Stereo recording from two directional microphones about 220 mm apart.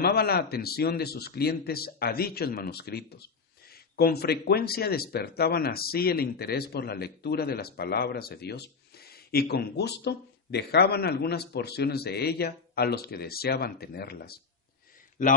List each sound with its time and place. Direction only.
0.0 s speech: 45° left (ahead or behind)